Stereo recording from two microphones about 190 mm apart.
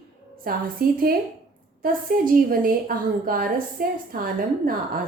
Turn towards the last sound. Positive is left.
turn(degrees=-50)  # may be behind; listen again after turning